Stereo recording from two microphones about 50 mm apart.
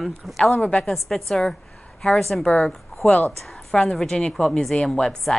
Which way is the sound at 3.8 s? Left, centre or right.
Centre.